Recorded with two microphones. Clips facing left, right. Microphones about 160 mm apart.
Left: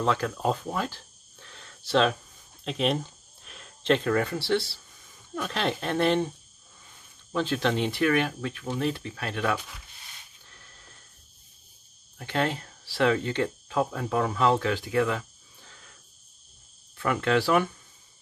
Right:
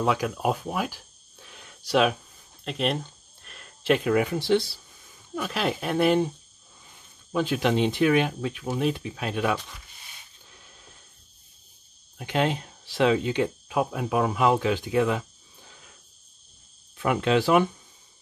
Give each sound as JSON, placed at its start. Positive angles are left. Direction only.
{"t": 0.0, "sound": "speech", "side_deg": -10}
{"t": 2.6, "sound": "speech", "side_deg": 0}
{"t": 7.3, "sound": "speech", "side_deg": -15}
{"t": 10.4, "sound": "a sound", "side_deg": -15}
{"t": 12.2, "sound": "speech", "side_deg": -15}